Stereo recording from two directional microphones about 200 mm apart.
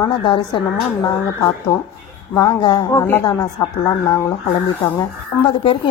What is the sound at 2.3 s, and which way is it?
A woman's voice, 20° left (ahead or behind).